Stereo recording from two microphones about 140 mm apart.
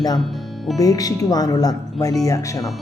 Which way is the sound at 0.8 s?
25° left (ahead or behind).